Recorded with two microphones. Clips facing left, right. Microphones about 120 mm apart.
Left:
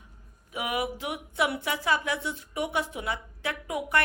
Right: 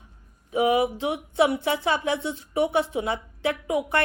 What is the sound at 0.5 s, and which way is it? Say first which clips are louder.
A woman's voice: right 9 dB; 25° right (ahead or behind).